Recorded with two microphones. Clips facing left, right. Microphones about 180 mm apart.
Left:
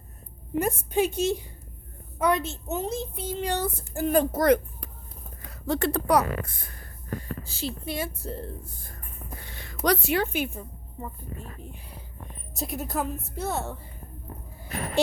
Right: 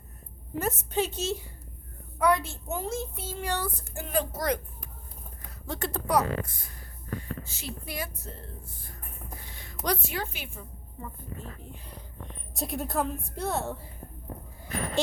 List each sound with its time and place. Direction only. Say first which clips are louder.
0.6 s a woman's voice: left 4 dB; 10° left (ahead or behind)
3.9 s a woman's voice: left 8 dB; 45° left (ahead or behind); by 4.9 s 60° left (ahead or behind)
5.5 s a woman's voice: left 8 dB; 75° left (ahead or behind); by 6.8 s 60° left (ahead or behind)
7.2 s speech: left 5 dB; 35° left (ahead or behind)
9.4 s a woman's voice: left 8 dB; 70° left (ahead or behind)
11.0 s a child's voice: left 4 dB; 20° left (ahead or behind)
12.5 s a woman's voice: even; centre (ahead or behind)